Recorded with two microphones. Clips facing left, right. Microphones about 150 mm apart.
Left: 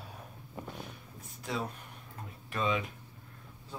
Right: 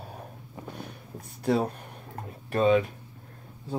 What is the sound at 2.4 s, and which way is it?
Speech, 40° right (ahead or behind).